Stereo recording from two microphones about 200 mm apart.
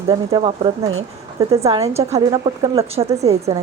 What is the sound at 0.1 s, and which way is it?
Speech, 20° right (ahead or behind).